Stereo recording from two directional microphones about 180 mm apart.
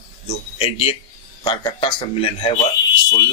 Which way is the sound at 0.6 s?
35° left (ahead or behind).